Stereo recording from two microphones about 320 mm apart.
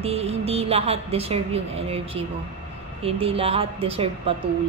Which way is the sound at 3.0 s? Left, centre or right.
Centre.